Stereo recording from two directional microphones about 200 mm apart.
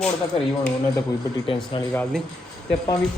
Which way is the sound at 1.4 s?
25° left (ahead or behind).